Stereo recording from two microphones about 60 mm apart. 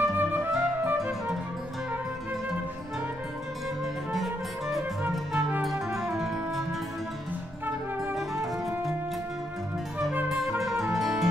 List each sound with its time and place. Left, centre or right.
0.0 s music: right
4.1 s music: centre
8.0 s music: centre
10.6 s music: centre